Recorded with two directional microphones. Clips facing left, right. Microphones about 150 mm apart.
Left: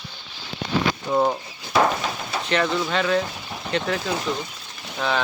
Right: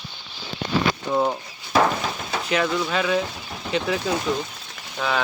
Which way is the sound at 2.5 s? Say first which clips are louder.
Even; 5° right (ahead or behind).